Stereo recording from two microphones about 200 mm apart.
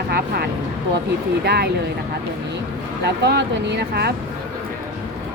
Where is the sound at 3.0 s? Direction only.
55° right (ahead or behind).